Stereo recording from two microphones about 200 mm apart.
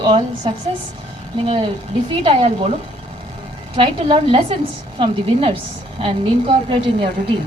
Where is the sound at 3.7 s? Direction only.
25° right (ahead or behind).